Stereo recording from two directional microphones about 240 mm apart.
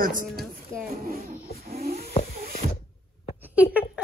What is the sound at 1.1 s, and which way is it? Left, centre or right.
Snoring, right.